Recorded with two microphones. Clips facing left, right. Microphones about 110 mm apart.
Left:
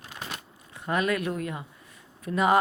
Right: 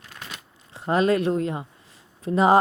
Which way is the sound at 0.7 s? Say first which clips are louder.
Right 6 dB; 30° right (ahead or behind).